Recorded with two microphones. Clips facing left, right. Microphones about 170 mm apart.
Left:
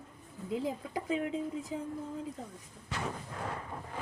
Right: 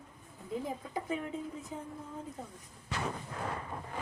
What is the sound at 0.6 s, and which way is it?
Speech, 90° left.